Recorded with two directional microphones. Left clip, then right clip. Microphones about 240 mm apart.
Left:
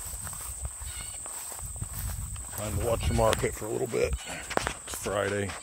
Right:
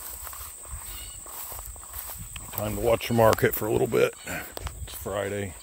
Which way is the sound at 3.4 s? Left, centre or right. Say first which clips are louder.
Right 7 dB; right.